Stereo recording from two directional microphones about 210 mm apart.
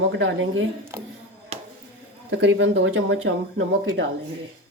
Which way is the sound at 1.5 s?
30° right (ahead or behind).